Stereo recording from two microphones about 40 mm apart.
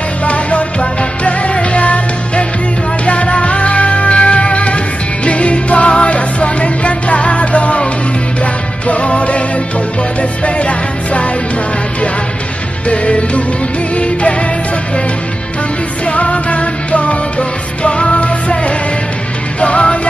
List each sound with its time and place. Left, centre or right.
0.2 s music: left
10.4 s music: left
12.8 s music: left
16.1 s music: left
19.6 s music: left